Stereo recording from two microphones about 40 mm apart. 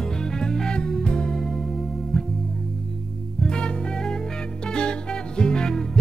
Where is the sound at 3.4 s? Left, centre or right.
Left.